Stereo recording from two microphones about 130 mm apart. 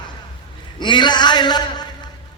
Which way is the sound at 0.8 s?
35° left (ahead or behind).